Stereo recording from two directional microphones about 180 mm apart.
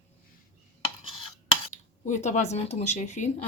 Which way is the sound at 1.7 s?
40° left (ahead or behind).